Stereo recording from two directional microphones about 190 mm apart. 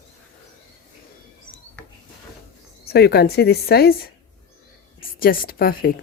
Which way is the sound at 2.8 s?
55° left (ahead or behind).